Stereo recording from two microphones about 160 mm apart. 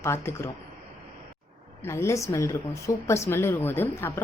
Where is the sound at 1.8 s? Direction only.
15° left (ahead or behind).